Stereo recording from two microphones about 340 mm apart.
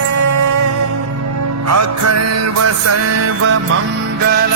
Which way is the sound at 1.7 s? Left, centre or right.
Right.